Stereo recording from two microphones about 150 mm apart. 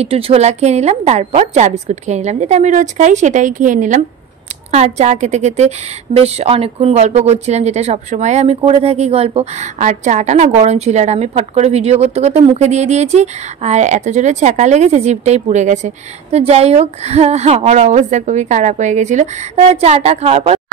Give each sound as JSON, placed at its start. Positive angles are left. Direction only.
{"t": 0.0, "sound": "a woman's voice", "side_deg": -45}